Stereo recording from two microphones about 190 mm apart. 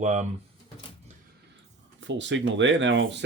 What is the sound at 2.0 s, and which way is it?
Speech, 75° right (ahead or behind).